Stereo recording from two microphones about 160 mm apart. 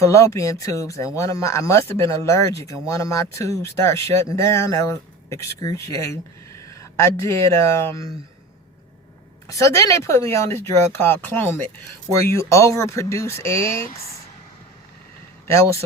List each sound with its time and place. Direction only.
0.0 s speech: 20° left (ahead or behind)
9.5 s speech: 20° left (ahead or behind)
15.4 s speech: 20° left (ahead or behind)